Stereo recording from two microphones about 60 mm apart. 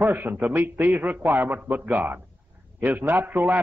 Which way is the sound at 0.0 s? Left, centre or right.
Right.